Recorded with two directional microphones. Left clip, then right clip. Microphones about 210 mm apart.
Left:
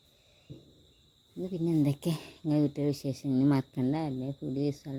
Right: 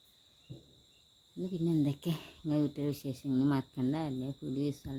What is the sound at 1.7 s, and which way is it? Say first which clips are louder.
Speech: left 3 dB; 20° left (ahead or behind).